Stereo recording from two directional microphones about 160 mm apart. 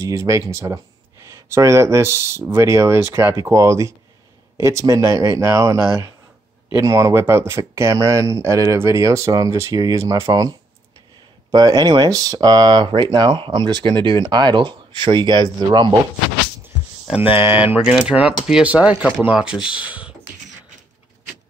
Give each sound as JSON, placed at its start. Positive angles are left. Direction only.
{"t": 0.0, "sound": "speech", "side_deg": -20}
{"t": 11.5, "sound": "speech", "side_deg": -25}
{"t": 16.6, "sound": "a sound", "side_deg": -10}
{"t": 17.5, "sound": "speech", "side_deg": -10}